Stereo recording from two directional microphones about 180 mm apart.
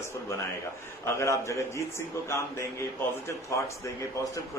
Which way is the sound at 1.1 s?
15° left (ahead or behind).